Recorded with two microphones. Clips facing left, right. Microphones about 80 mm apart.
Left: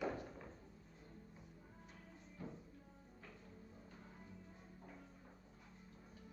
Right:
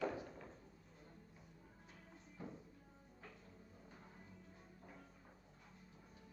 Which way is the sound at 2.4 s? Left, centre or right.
Centre.